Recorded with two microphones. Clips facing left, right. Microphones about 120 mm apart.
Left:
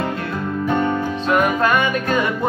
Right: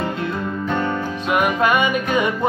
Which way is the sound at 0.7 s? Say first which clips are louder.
Left 4 dB; 15° left (ahead or behind).